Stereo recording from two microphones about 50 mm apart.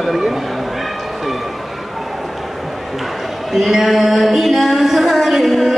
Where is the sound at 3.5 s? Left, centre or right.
Centre.